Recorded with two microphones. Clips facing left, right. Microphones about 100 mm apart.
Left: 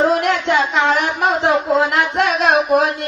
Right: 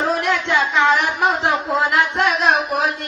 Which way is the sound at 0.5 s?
35° left (ahead or behind).